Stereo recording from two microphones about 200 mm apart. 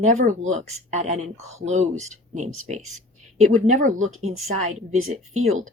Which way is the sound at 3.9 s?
90° right.